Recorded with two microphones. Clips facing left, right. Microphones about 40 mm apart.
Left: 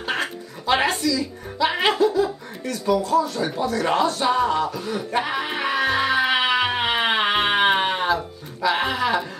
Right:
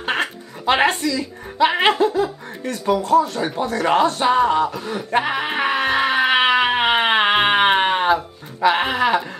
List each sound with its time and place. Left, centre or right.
0.0 s a sound: right
2.6 s speech: right
3.8 s music: right